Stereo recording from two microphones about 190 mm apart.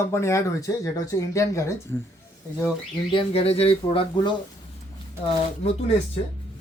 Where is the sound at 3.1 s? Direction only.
30° left (ahead or behind).